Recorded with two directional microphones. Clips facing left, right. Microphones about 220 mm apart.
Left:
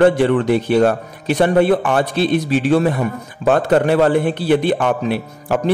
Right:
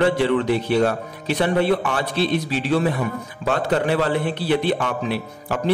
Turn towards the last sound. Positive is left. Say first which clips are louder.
# left 5 dB
turn(degrees=50)  # may be behind; listen again after turning